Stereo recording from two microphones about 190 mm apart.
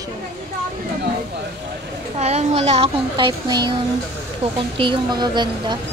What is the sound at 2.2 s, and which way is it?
A child's voice, 35° right (ahead or behind).